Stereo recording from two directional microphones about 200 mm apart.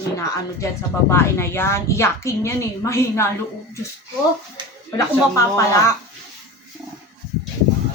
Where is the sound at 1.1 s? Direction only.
10° left (ahead or behind).